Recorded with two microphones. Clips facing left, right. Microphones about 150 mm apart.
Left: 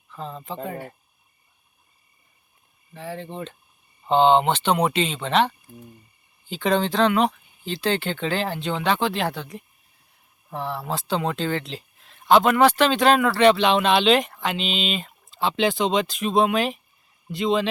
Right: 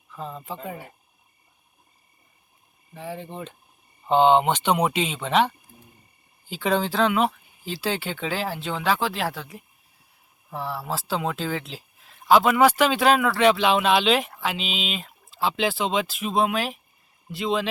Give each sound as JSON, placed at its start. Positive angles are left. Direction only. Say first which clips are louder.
{"t": 0.1, "sound": "speech", "louder": "left 1 dB", "side_deg": -10}
{"t": 2.9, "sound": "speech", "louder": "left 1 dB", "side_deg": -10}